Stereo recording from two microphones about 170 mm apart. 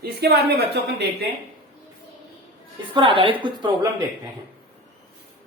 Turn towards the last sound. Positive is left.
turn(degrees=-25)  # may be behind; listen again after turning